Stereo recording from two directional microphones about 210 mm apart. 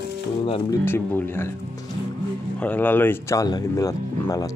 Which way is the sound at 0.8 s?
10° left (ahead or behind).